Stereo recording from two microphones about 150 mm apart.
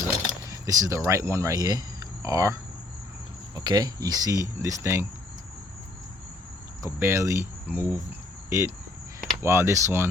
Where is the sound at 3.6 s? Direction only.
30° right (ahead or behind).